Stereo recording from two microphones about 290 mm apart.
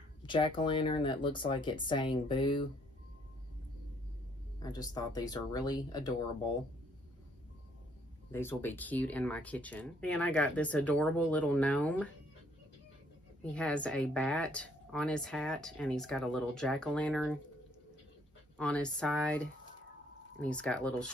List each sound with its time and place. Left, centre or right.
0.2 s speech: centre
4.6 s speech: centre
8.3 s speech: centre
13.4 s speech: centre
18.6 s speech: centre